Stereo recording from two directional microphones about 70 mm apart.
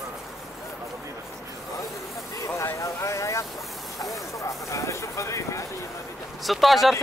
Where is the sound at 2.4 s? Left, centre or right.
Left.